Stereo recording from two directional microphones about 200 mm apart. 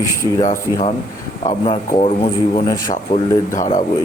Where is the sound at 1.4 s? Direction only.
30° left (ahead or behind).